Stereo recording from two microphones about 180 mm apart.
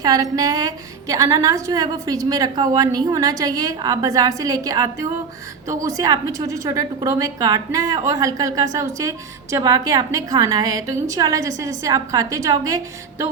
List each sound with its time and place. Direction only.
0.0 s a woman's voice: 20° right (ahead or behind)